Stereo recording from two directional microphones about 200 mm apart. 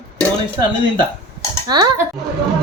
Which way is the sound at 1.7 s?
20° right (ahead or behind).